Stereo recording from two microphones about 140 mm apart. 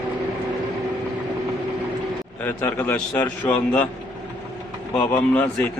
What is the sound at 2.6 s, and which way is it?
A man's voice, 10° left (ahead or behind).